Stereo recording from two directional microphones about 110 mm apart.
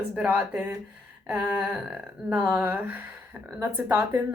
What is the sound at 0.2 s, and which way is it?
A woman's voice, 10° right (ahead or behind).